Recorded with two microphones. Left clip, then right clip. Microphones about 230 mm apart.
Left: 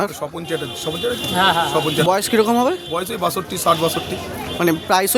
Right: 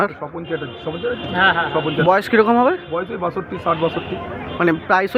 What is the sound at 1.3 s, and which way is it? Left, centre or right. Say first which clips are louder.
Speech: right 1 dB; left.